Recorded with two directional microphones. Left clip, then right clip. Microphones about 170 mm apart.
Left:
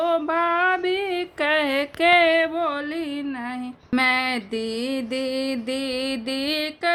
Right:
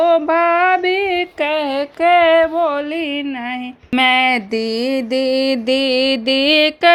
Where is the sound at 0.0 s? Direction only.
30° right (ahead or behind).